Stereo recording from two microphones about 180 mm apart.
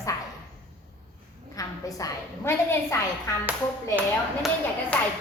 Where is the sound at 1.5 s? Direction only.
15° left (ahead or behind).